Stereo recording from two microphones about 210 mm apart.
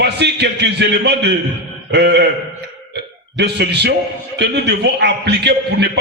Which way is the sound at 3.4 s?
50° right (ahead or behind).